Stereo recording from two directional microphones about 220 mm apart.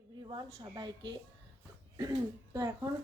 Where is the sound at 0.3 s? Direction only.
20° right (ahead or behind).